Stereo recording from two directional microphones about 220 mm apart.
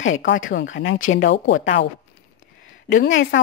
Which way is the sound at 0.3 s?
55° left (ahead or behind).